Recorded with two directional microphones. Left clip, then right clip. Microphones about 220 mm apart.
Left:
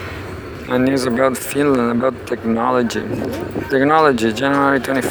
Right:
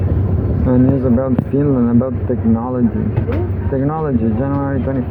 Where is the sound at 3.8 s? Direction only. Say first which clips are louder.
Left 7 dB; 70° left (ahead or behind).